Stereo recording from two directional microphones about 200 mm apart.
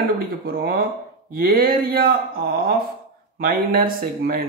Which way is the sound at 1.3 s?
45° right (ahead or behind).